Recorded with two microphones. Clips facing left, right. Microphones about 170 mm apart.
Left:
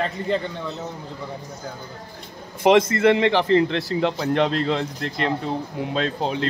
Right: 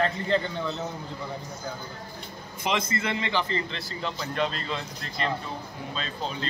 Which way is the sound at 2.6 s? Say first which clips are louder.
Left 12 dB; 70° left (ahead or behind).